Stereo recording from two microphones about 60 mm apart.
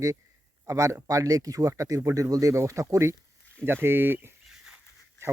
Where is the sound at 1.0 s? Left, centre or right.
Right.